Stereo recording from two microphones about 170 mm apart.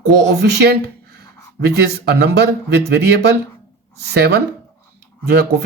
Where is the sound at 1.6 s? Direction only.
70° right (ahead or behind).